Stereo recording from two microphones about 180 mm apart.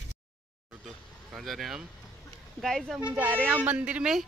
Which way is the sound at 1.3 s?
Centre (ahead or behind).